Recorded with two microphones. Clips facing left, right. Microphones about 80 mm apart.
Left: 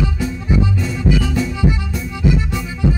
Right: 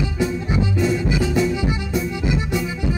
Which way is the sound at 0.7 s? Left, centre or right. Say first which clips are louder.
Left 1 dB; centre.